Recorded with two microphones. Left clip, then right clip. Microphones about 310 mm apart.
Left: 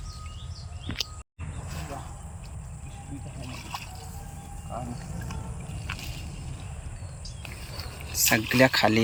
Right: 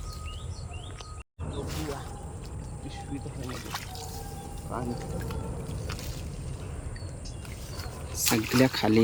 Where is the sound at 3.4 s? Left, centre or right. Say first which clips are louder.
Left 2 dB; centre.